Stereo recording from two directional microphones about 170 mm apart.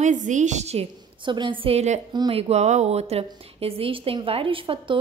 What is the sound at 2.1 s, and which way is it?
A woman's voice, 30° right (ahead or behind).